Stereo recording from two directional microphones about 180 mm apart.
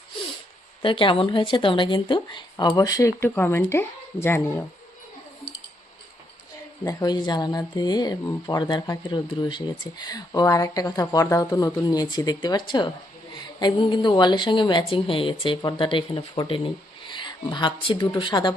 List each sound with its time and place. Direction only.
0.8 s speech: 30° left (ahead or behind)
6.8 s speech: 25° left (ahead or behind)